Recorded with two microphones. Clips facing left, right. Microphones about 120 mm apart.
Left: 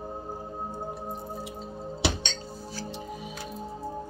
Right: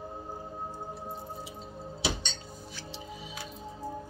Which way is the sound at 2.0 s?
65° left (ahead or behind).